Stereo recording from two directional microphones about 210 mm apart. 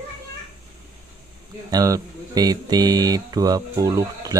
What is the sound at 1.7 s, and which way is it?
Speech, 15° right (ahead or behind).